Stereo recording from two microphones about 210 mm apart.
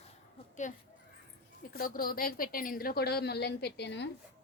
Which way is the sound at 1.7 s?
45° left (ahead or behind).